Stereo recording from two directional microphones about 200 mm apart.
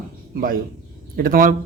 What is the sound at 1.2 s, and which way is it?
Speech, 45° right (ahead or behind).